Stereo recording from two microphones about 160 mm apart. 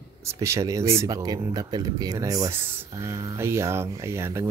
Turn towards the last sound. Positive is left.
turn(degrees=-15)  # may be behind; listen again after turning